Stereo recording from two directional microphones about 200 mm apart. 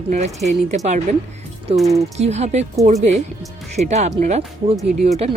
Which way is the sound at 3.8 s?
35° right (ahead or behind).